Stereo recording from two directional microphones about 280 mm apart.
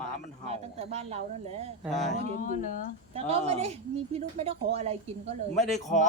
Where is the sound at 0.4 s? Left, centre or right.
Right.